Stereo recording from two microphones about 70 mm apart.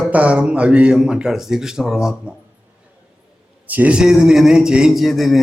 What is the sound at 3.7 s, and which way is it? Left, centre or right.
Speech, right.